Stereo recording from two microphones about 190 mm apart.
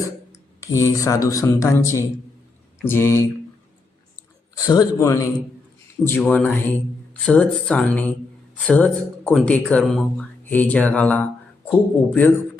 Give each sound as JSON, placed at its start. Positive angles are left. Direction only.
{"t": 0.3, "sound": "speech", "side_deg": 15}
{"t": 4.5, "sound": "speech", "side_deg": 20}